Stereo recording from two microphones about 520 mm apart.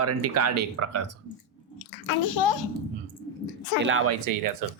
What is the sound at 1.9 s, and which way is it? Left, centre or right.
Speech, left.